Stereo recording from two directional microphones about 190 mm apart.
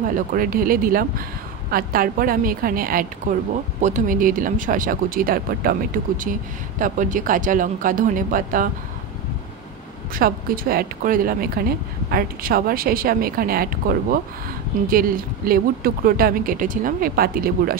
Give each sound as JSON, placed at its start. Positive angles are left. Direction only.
{"t": 0.1, "sound": "speech", "side_deg": -45}
{"t": 10.1, "sound": "speech", "side_deg": -50}